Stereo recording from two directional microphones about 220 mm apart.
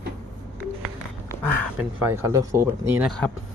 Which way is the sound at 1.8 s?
5° right (ahead or behind).